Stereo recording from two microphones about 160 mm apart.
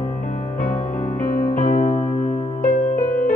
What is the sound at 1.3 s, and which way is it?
Music, 60° left (ahead or behind).